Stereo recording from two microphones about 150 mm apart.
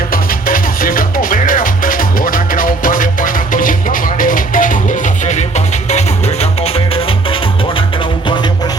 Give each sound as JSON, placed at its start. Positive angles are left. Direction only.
{"t": 0.1, "sound": "music", "side_deg": 70}